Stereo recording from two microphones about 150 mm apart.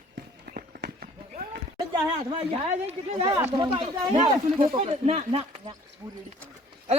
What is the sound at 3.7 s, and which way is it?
Speech, 35° right (ahead or behind).